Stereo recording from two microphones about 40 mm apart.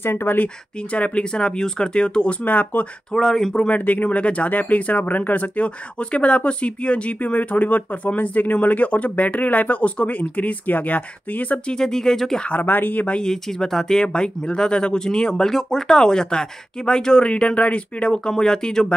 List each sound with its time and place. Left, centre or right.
0.0 s speech: left
0.9 s speech: left
1.3 s speech: centre
2.4 s speech: left
3.1 s speech: centre
3.6 s speech: left
5.9 s speech: left
11.6 s speech: centre
12.4 s speech: left
13.2 s speech: centre
14.0 s speech: left